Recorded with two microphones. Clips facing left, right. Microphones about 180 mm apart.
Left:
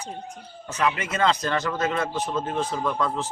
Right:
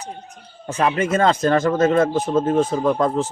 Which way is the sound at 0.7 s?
45° right (ahead or behind).